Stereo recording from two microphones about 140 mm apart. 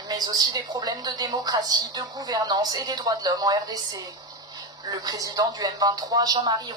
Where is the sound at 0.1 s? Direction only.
30° right (ahead or behind).